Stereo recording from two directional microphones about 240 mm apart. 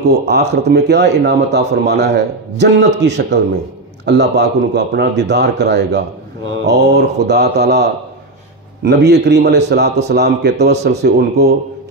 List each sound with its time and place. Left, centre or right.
0.5 s speech: right